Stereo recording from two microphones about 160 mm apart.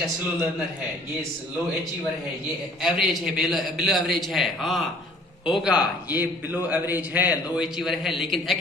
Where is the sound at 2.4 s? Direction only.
Centre (ahead or behind).